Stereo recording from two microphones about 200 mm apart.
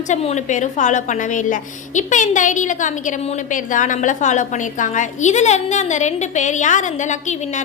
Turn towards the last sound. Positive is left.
turn(degrees=35)  # may be behind; listen again after turning